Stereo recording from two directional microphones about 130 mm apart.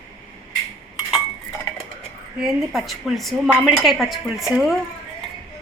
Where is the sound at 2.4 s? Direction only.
Centre (ahead or behind).